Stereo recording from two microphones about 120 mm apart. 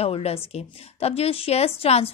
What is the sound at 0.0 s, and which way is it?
A woman's voice, 55° left (ahead or behind).